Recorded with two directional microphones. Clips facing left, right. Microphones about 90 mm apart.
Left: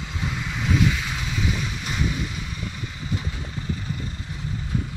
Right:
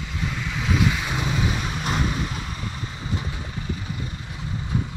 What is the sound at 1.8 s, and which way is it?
Vehicle, 45° right (ahead or behind).